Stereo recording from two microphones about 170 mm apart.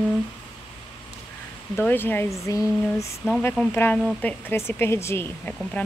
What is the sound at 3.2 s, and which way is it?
A woman's voice, 10° left (ahead or behind).